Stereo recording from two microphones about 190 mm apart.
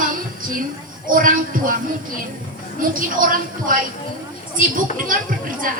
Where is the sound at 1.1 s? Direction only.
45° right (ahead or behind).